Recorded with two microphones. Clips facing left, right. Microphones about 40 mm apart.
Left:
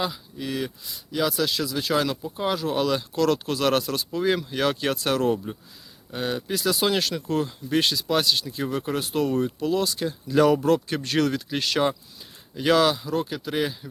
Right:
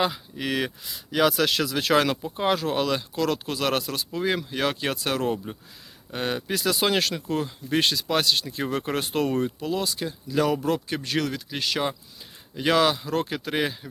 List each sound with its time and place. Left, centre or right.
0.3 s speech: right
1.4 s speech: right
2.2 s speech: right
2.7 s speech: centre
6.1 s speech: right
7.3 s speech: centre
7.8 s speech: right
9.6 s speech: centre
10.2 s speech: centre
12.5 s speech: centre
13.1 s speech: right